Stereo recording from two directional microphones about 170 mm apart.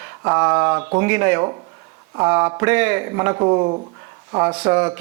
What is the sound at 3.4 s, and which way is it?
Speech, 30° right (ahead or behind).